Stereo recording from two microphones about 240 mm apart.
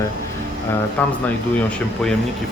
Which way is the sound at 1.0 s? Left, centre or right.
Centre.